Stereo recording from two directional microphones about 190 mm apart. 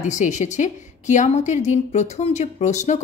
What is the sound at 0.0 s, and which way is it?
A woman's voice, 40° left (ahead or behind).